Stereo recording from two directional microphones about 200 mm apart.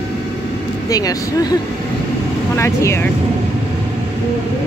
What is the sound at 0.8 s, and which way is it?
Speech, 20° left (ahead or behind).